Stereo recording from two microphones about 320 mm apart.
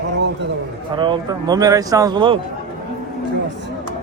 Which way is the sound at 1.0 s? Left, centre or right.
Centre.